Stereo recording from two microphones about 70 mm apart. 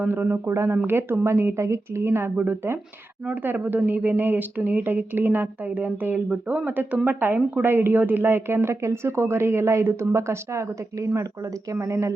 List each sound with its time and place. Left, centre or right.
0.1 s a woman's voice: right
0.5 s speech: right
0.9 s a woman's voice: right
2.3 s a woman's voice: right